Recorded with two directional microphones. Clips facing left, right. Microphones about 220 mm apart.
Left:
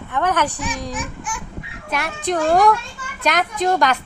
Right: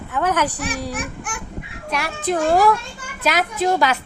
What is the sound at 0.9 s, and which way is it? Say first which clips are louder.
Speech: even; 60° right (ahead or behind).